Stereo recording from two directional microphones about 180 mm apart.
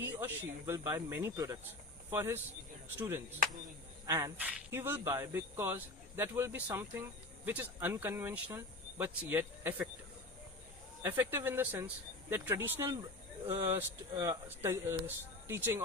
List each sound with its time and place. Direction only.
0.0 s speech: 10° right (ahead or behind)
4.0 s speech: 20° right (ahead or behind)
11.0 s speech: 15° right (ahead or behind)